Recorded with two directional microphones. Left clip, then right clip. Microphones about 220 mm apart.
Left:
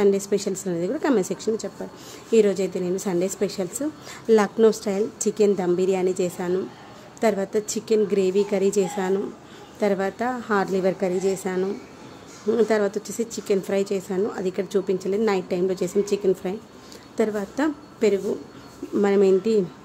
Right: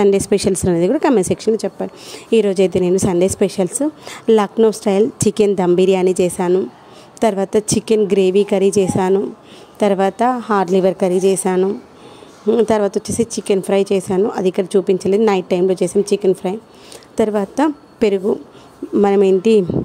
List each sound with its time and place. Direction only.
0.0 s a woman's voice: 35° right (ahead or behind)